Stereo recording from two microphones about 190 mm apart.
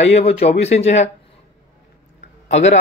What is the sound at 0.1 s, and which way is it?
Speech, 35° left (ahead or behind).